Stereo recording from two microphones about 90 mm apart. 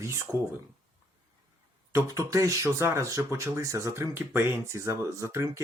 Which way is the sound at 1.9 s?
35° right (ahead or behind).